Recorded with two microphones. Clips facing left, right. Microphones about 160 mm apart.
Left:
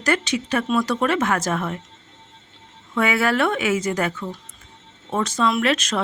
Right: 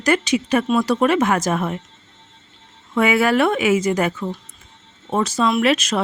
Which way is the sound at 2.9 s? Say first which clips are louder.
Right 4 dB; 15° right (ahead or behind).